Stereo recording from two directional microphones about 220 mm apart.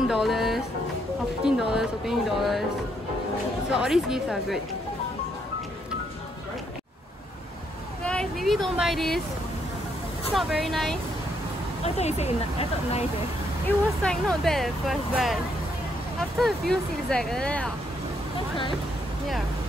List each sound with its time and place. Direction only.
0.1 s speech: centre (ahead or behind)
3.7 s speech: 5° right (ahead or behind)
8.0 s speech: 5° left (ahead or behind)
10.3 s speech: centre (ahead or behind)
11.8 s speech: 30° left (ahead or behind)
13.7 s speech: 5° left (ahead or behind)